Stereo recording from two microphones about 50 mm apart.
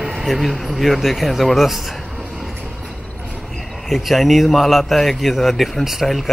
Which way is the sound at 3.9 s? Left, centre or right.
Centre.